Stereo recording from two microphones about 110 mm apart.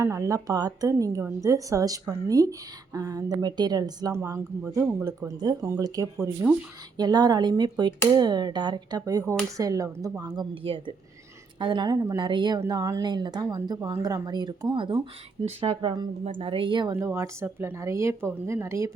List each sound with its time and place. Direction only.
0.0 s a woman's voice: 30° right (ahead or behind)
4.1 s speech: 25° right (ahead or behind)
5.4 s a woman's voice: 40° right (ahead or behind)
6.9 s a woman's voice: 40° right (ahead or behind)
10.5 s a woman's voice: 50° right (ahead or behind)
12.5 s a woman's voice: 30° right (ahead or behind)
16.9 s speech: 25° right (ahead or behind)